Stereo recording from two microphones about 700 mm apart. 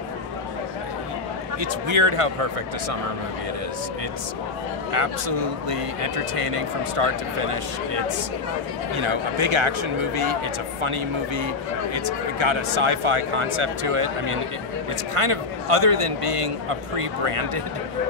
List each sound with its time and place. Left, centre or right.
1.6 s speech: right
4.9 s speech: right